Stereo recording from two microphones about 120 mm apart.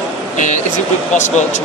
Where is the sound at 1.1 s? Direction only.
85° left.